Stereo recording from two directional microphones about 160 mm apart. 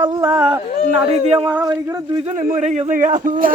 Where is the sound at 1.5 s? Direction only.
25° right (ahead or behind).